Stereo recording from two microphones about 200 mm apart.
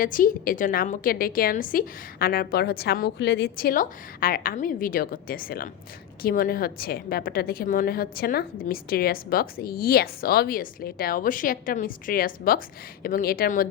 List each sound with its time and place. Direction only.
0.0 s a woman's voice: 45° left (ahead or behind)